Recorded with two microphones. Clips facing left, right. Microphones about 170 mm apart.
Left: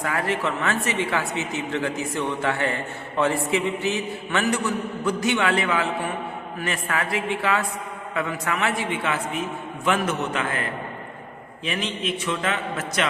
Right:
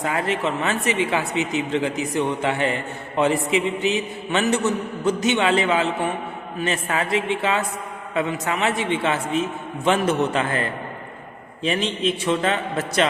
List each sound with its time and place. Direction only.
0.0 s a man's voice: 20° right (ahead or behind)